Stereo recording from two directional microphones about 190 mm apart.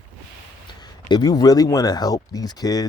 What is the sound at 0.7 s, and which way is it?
Speech, 25° left (ahead or behind).